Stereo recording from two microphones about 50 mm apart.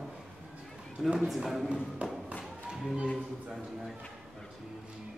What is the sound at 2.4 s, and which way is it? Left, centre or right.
Music, centre.